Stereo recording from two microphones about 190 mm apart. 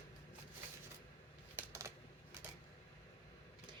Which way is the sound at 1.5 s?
15° right (ahead or behind).